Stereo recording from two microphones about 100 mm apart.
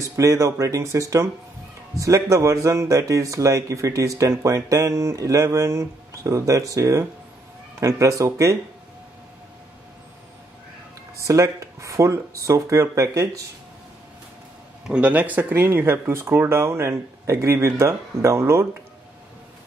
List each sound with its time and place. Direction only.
0.0 s a man's voice: 30° right (ahead or behind)
11.1 s a man's voice: 30° right (ahead or behind)
14.9 s speech: 10° right (ahead or behind)